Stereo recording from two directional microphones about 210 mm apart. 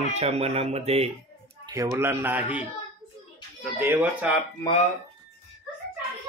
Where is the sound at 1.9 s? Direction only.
10° right (ahead or behind).